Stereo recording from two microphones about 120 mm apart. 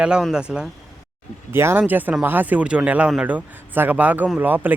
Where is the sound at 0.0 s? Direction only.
5° right (ahead or behind).